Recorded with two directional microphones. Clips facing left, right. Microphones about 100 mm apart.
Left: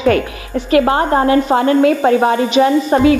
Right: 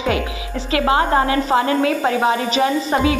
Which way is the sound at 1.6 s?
30° left (ahead or behind).